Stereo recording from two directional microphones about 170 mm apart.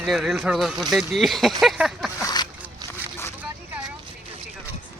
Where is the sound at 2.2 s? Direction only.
25° left (ahead or behind).